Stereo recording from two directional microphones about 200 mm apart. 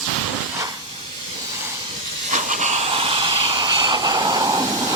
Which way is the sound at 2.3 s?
40° right (ahead or behind).